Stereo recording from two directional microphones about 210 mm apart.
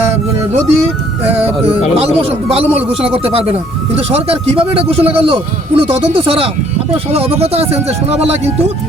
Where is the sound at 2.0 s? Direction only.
30° right (ahead or behind).